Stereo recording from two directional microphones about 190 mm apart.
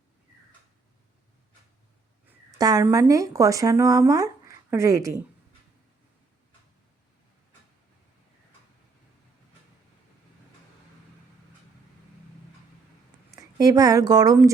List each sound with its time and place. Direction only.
2.5 s speech: 20° right (ahead or behind)
13.3 s speech: 20° right (ahead or behind)